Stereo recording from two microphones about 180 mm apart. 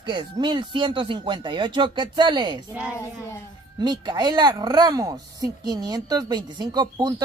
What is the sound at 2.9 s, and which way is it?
Speech, 15° left (ahead or behind).